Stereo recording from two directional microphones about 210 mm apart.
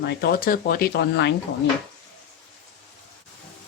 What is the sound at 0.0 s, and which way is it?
Speech, 50° left (ahead or behind).